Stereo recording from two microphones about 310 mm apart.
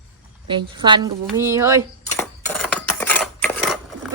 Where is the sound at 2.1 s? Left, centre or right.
Centre.